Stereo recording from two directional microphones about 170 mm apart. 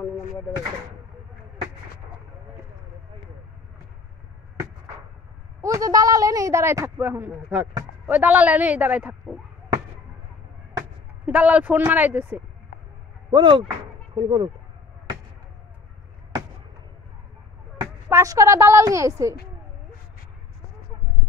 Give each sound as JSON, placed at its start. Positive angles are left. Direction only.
{"t": 5.6, "sound": "speech", "side_deg": -20}
{"t": 11.2, "sound": "speech", "side_deg": -5}
{"t": 13.3, "sound": "speech", "side_deg": -30}
{"t": 17.7, "sound": "speech", "side_deg": -20}